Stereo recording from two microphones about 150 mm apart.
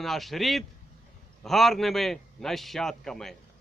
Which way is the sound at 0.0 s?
Centre (ahead or behind).